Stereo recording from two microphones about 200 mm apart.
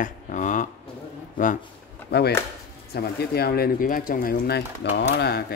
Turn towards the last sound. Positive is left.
turn(degrees=50)  # may be behind; listen again after turning